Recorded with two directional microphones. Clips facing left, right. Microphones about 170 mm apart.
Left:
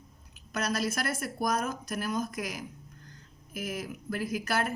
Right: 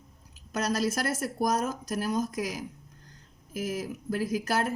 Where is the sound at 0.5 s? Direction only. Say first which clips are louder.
Right 3 dB; 40° right (ahead or behind).